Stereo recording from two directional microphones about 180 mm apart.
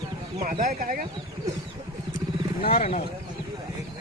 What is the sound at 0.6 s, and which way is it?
Speech, 50° right (ahead or behind).